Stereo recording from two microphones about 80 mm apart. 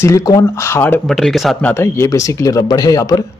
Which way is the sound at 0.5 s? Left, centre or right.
Left.